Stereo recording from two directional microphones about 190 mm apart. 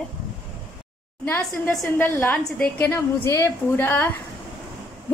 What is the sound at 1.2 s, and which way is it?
A woman's voice, 10° left (ahead or behind).